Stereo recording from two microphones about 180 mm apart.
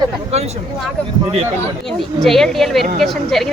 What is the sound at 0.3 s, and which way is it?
Speech, 35° right (ahead or behind).